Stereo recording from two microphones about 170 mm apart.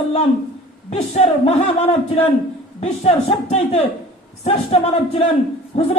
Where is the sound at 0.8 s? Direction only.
40° left (ahead or behind).